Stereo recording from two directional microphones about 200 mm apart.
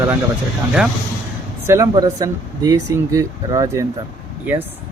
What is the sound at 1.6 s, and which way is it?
Speech, 15° right (ahead or behind).